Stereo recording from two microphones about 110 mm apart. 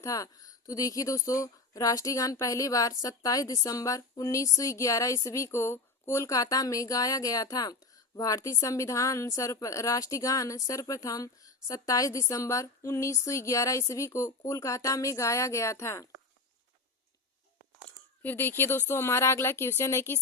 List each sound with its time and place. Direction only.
0.0 s speech: 30° left (ahead or behind)
18.2 s speech: 20° left (ahead or behind)